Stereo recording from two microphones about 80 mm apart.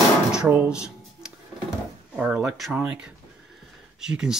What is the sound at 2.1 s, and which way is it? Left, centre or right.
Speech, centre.